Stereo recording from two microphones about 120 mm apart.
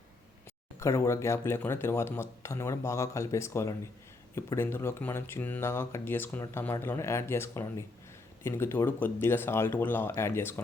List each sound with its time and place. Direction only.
0.8 s speech: 25° left (ahead or behind)